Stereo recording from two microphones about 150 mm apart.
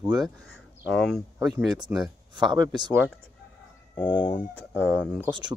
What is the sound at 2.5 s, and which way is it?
Speech, 30° right (ahead or behind).